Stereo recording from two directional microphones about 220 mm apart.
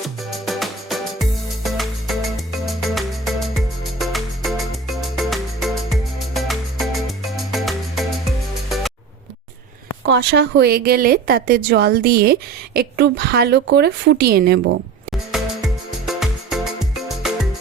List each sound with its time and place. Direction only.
0.3 s music: centre (ahead or behind)
10.1 s speech: 50° right (ahead or behind)
15.3 s music: centre (ahead or behind)